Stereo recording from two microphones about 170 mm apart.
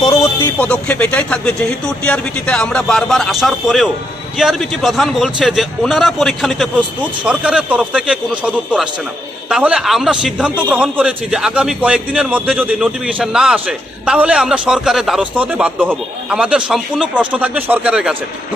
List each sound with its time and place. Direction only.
0.0 s a man's voice: 20° left (ahead or behind); by 18.2 s 5° right (ahead or behind)